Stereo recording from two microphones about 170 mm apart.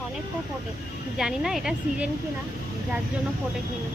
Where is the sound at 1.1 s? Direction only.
5° right (ahead or behind).